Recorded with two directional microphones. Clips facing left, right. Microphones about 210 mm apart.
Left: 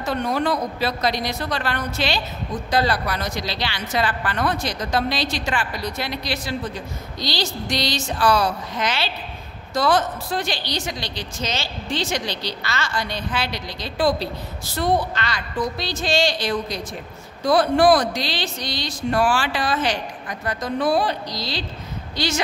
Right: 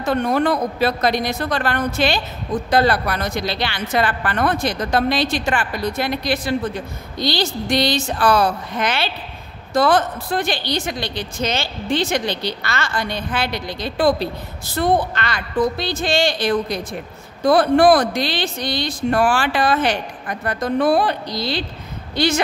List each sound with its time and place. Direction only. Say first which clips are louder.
0.0 s a woman's voice: right 4 dB; 55° right (ahead or behind)